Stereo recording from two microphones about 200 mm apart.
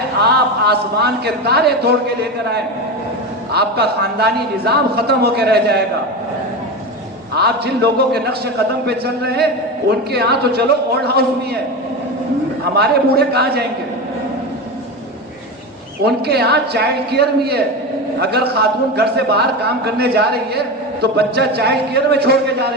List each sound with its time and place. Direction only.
0.2 s a man's voice: 55° right (ahead or behind)
7.3 s a man's voice: 55° right (ahead or behind)
12.7 s a man's voice: 55° right (ahead or behind)
16.0 s a man's voice: 55° right (ahead or behind)